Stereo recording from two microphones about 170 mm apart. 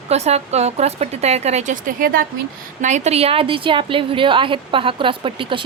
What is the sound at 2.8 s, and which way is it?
A woman's voice, 40° right (ahead or behind).